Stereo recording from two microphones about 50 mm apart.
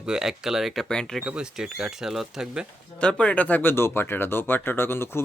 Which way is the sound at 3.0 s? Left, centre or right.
Centre.